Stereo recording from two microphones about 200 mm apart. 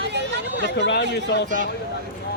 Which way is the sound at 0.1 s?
60° right (ahead or behind).